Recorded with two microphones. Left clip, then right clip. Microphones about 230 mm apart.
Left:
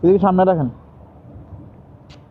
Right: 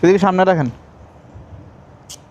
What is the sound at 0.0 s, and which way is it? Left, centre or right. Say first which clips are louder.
Speech: right 1 dB; right.